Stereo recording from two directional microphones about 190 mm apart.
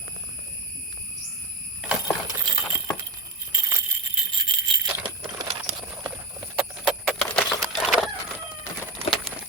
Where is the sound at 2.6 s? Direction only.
5° left (ahead or behind).